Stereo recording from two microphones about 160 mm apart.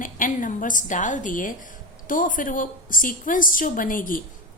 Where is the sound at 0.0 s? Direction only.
55° left (ahead or behind).